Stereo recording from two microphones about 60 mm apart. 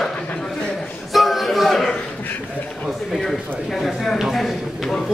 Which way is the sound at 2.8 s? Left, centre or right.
Centre.